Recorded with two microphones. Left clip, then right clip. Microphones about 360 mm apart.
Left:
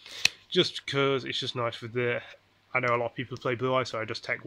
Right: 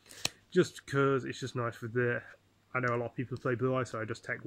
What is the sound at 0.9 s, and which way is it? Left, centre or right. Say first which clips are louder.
Speech: left 2 dB; left.